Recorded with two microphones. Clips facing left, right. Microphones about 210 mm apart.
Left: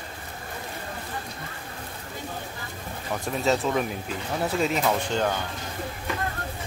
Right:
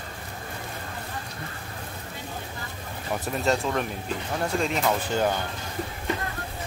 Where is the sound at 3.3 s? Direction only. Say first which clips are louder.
Left 2 dB; centre (ahead or behind).